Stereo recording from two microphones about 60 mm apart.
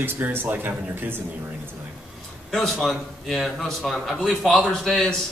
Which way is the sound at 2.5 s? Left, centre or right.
Centre.